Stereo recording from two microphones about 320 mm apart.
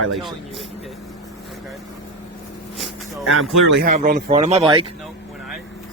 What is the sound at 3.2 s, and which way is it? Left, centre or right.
Speech, right.